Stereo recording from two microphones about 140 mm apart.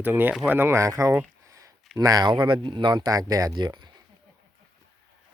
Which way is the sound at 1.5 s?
25° right (ahead or behind).